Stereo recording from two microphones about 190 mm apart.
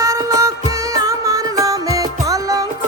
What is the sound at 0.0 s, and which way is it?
Music, 15° right (ahead or behind).